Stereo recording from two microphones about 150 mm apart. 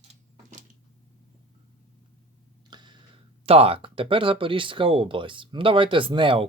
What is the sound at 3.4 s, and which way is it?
Speech, 40° right (ahead or behind).